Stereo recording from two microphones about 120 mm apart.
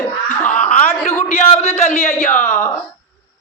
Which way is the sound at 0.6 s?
65° left (ahead or behind).